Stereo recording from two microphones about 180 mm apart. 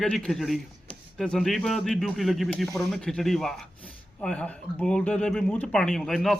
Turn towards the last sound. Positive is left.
turn(degrees=0)  # may be behind; listen again after turning